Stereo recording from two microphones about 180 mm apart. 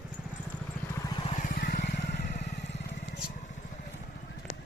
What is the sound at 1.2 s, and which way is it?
Vehicle, 40° left (ahead or behind).